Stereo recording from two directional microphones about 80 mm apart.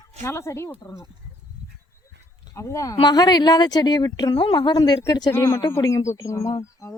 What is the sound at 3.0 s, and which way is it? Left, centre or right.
Speech, left.